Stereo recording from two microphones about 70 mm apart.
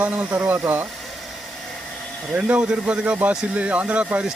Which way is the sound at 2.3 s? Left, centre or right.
Centre.